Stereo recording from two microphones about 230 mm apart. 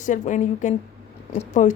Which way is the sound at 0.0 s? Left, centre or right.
Left.